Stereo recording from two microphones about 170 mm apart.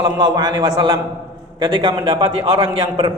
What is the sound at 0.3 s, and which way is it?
A man's voice, 25° right (ahead or behind).